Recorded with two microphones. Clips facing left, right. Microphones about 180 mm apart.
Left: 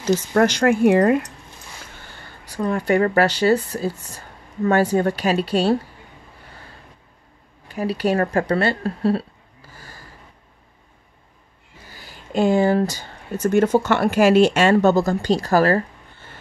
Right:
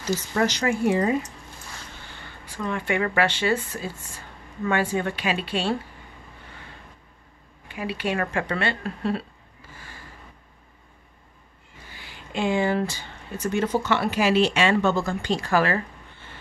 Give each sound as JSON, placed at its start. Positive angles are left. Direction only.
{"t": 0.0, "sound": "speech", "side_deg": 60}
{"t": 2.2, "sound": "speech", "side_deg": 40}
{"t": 7.6, "sound": "speech", "side_deg": 40}
{"t": 9.8, "sound": "a sound", "side_deg": 40}
{"t": 11.9, "sound": "speech", "side_deg": 40}